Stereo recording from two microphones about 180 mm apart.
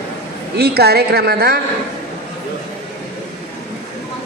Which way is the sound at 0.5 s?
60° right (ahead or behind).